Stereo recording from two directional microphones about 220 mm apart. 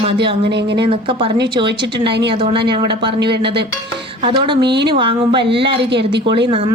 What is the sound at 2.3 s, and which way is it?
Speech, 25° right (ahead or behind).